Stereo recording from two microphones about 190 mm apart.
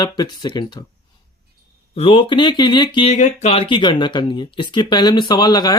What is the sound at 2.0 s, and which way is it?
Speech, 30° left (ahead or behind).